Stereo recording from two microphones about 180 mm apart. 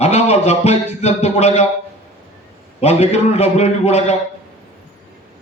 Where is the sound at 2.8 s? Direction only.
35° left (ahead or behind).